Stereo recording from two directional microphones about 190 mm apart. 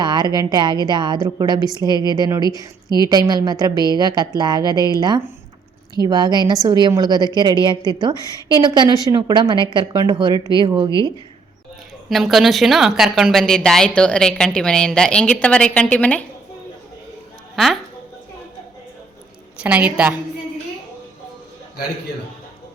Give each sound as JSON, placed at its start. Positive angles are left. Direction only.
{"t": 0.0, "sound": "a sound", "side_deg": -20}
{"t": 0.3, "sound": "a woman's voice", "side_deg": -20}
{"t": 12.0, "sound": "a woman's voice", "side_deg": 0}
{"t": 19.6, "sound": "a woman's voice", "side_deg": -5}